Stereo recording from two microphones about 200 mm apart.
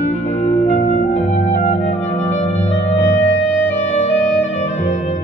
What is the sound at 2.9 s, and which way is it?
Music, 65° left (ahead or behind).